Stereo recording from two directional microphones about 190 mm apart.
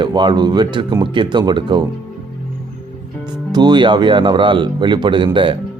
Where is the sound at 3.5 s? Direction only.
25° right (ahead or behind).